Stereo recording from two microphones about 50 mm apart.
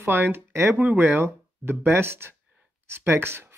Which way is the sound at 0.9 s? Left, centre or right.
Right.